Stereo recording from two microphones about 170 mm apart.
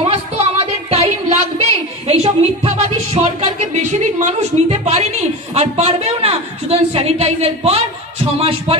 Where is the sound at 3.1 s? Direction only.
45° right (ahead or behind).